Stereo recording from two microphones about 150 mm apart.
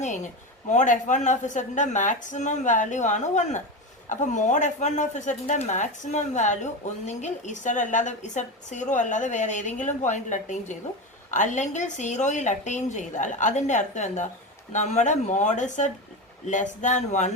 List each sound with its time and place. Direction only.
0.7 s a woman's voice: 55° left (ahead or behind)